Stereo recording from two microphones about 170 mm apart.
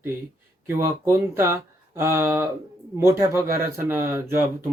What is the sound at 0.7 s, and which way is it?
Speech, 15° right (ahead or behind).